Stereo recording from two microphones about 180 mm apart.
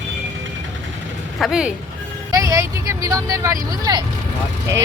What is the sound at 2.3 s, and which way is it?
Speech, 20° right (ahead or behind).